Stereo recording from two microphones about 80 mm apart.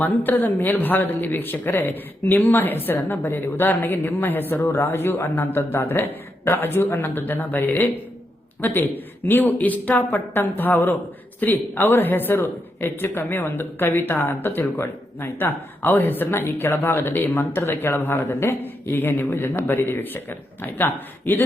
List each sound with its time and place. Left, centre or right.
0.0 s speech: left